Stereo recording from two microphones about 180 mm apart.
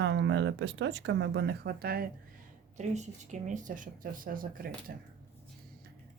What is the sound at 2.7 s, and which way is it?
Speech, 40° right (ahead or behind).